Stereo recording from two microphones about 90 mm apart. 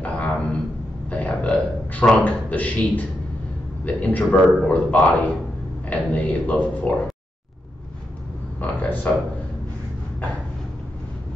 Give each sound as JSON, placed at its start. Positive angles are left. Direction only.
{"t": 0.0, "sound": "a sound", "side_deg": 15}
{"t": 1.1, "sound": "burping", "side_deg": 15}
{"t": 2.2, "sound": "a man's voice", "side_deg": 15}
{"t": 8.5, "sound": "speech", "side_deg": 20}